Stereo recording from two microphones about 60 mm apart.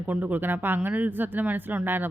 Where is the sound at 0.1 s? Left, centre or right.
Right.